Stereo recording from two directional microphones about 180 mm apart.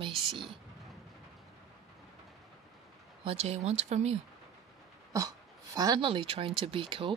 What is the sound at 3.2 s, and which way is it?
Speech, 35° right (ahead or behind).